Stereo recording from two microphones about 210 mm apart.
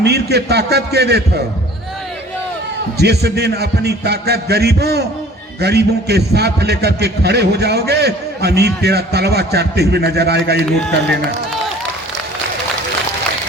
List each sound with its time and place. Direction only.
0.0 s a man's voice: 50° right (ahead or behind)
3.0 s a man's voice: 50° right (ahead or behind)